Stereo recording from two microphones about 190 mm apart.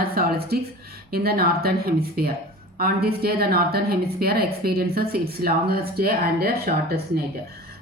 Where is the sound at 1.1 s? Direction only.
55° right (ahead or behind).